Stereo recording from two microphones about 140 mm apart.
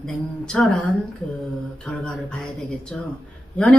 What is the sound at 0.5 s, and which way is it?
Speech, 5° left (ahead or behind).